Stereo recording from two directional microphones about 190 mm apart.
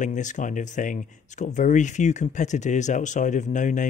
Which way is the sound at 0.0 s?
40° left (ahead or behind).